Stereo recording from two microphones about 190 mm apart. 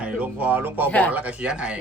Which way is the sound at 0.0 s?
10° right (ahead or behind).